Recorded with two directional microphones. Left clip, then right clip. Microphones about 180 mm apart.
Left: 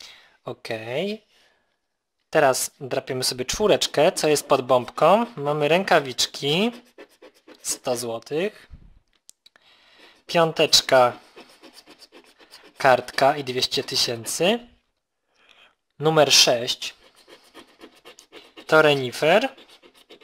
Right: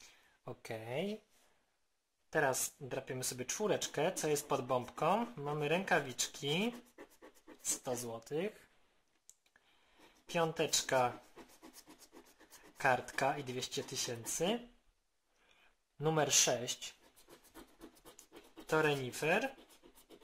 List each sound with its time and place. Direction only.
0.6 s speech: 35° left (ahead or behind)
2.9 s speech: 45° left (ahead or behind)
7.0 s scratch: 15° left (ahead or behind)
7.8 s speech: 40° left (ahead or behind)
10.2 s speech: 45° left (ahead or behind)
12.7 s speech: 45° left (ahead or behind)
16.0 s speech: 45° left (ahead or behind)
18.5 s speech: 45° left (ahead or behind)